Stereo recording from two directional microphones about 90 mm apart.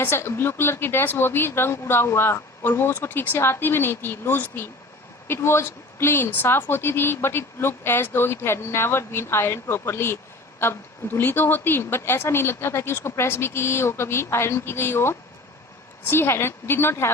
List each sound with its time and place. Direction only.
0.0 s a woman's voice: 25° left (ahead or behind)